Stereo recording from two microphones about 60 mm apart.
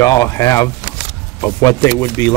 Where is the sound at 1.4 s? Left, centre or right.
Left.